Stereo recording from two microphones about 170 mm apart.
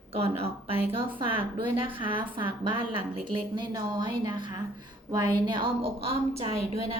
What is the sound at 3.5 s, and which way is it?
A woman's voice, 25° right (ahead or behind).